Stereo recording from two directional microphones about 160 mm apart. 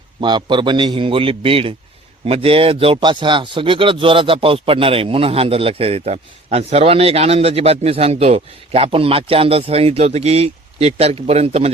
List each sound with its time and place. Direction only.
0.2 s a man's voice: 30° right (ahead or behind)